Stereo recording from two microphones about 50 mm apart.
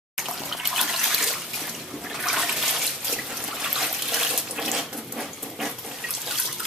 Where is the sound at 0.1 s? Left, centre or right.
Centre.